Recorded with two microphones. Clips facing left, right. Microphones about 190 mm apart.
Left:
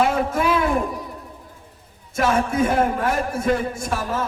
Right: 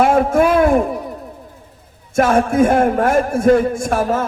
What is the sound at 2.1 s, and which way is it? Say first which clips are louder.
A man's voice: right 6 dB; 50° right (ahead or behind).